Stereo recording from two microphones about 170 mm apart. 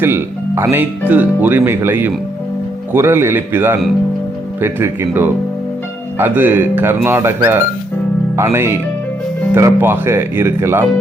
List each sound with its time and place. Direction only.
0.0 s speech: 15° right (ahead or behind)